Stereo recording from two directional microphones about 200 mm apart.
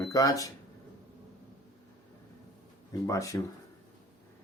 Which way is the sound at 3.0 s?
15° left (ahead or behind).